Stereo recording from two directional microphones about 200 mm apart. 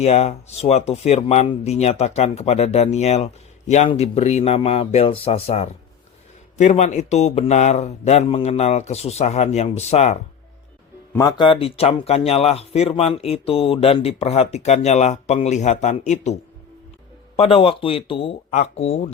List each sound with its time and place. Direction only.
0.0 s a man's voice: 35° left (ahead or behind)
11.1 s a man's voice: 15° left (ahead or behind)